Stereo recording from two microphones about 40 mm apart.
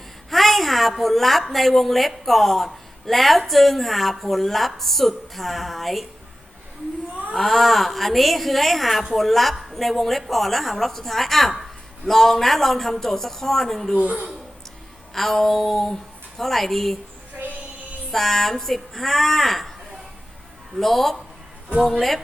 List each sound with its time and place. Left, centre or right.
0.3 s a sound: centre
1.0 s speech: centre
7.3 s a man's voice: centre
14.0 s a woman's voice: right
15.1 s a man's voice: centre
18.1 s a man's voice: centre
20.7 s a man's voice: centre